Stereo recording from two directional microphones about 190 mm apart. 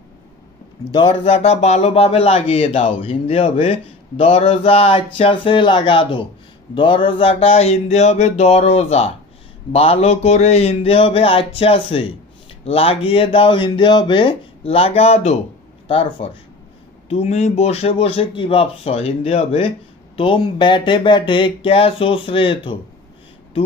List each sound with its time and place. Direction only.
0.9 s a man's voice: 30° left (ahead or behind)